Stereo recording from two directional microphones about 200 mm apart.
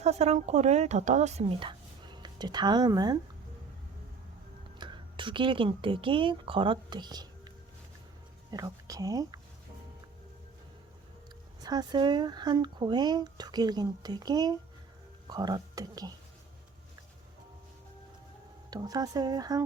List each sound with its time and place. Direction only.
0.0 s speech: 35° right (ahead or behind)
4.8 s speech: 25° right (ahead or behind)
8.4 s speech: 20° right (ahead or behind)
11.6 s speech: 20° right (ahead or behind)
18.7 s speech: 20° right (ahead or behind)